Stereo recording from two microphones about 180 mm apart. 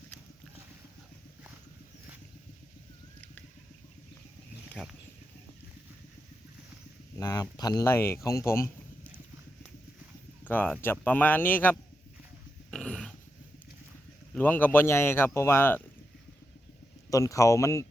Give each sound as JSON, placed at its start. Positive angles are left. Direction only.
{"t": 4.7, "sound": "speech", "side_deg": 0}
{"t": 7.2, "sound": "speech", "side_deg": 20}
{"t": 10.4, "sound": "speech", "side_deg": 10}
{"t": 12.7, "sound": "dog", "side_deg": 5}
{"t": 14.3, "sound": "speech", "side_deg": 10}
{"t": 17.1, "sound": "speech", "side_deg": 20}